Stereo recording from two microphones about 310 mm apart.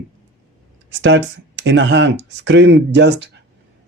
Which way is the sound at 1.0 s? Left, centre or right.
Right.